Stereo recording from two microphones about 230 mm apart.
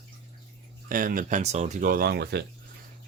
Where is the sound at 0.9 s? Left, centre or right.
Right.